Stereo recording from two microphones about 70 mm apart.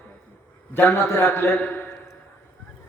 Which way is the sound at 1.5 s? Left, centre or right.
Left.